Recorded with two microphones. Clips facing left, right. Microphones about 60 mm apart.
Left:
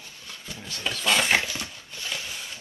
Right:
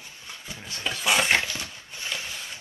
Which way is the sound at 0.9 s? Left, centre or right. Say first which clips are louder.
Even; centre.